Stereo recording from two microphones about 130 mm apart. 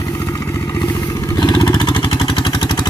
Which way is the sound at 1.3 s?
35° left (ahead or behind).